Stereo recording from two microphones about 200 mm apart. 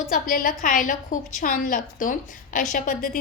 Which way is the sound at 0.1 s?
45° left (ahead or behind).